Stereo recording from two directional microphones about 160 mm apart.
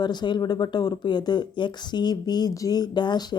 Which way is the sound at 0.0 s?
25° left (ahead or behind).